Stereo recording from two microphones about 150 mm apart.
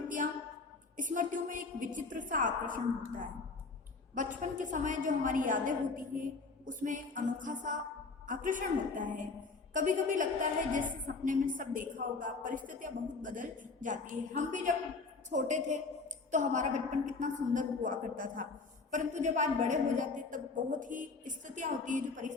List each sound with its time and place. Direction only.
0.9 s a woman's voice: 60° right (ahead or behind)